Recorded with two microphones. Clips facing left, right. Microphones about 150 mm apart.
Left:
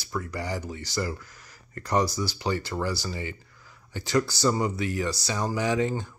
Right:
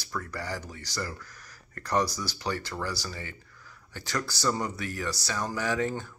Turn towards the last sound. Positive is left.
turn(degrees=15)  # may be behind; listen again after turning